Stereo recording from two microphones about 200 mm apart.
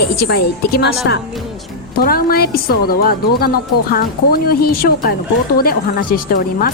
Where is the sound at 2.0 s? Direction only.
50° left (ahead or behind).